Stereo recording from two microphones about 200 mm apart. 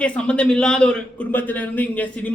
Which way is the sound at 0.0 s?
5° left (ahead or behind).